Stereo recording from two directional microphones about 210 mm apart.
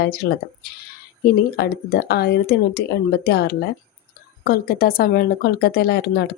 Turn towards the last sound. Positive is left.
turn(degrees=50)  # may be behind; listen again after turning